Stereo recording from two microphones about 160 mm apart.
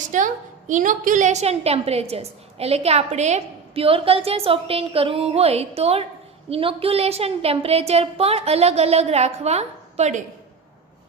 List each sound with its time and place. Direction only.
0.1 s a woman's voice: 50° right (ahead or behind)